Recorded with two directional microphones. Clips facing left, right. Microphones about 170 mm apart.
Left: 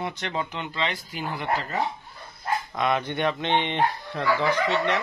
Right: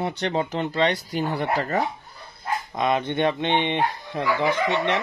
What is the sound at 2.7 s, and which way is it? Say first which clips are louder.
Speech: right 4 dB; 20° right (ahead or behind).